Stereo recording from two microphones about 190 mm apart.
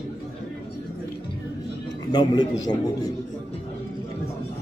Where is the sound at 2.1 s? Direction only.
20° left (ahead or behind).